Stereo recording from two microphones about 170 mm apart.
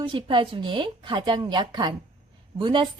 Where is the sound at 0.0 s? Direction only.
30° right (ahead or behind).